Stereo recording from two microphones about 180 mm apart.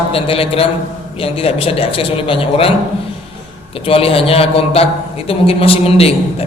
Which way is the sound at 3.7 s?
30° left (ahead or behind).